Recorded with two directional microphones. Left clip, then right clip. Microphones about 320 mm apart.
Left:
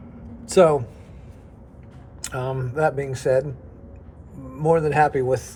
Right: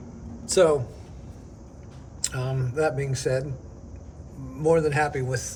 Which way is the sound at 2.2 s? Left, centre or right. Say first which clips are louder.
Left 4 dB; centre.